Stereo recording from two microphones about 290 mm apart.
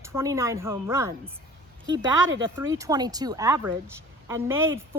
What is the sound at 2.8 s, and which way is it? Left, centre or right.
A woman's voice, centre.